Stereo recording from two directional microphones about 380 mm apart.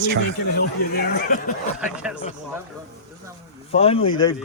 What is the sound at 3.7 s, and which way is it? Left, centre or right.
Speech, centre.